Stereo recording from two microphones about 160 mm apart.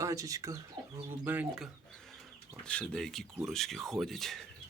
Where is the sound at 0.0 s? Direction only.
20° right (ahead or behind).